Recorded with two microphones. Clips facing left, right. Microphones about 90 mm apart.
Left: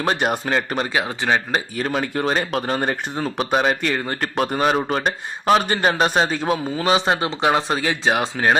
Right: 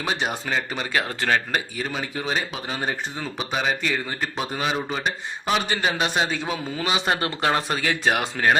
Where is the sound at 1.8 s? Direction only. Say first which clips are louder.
Left 7 dB; 65° left (ahead or behind).